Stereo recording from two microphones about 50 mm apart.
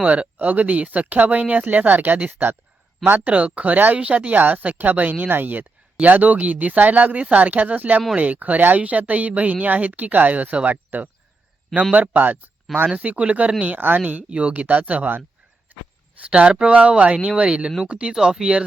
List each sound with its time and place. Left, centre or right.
0.0 s speech: right
3.3 s speech: right
3.9 s speech: right
13.7 s speech: right
14.1 s speech: right
15.7 s a sound: right
16.2 s speech: right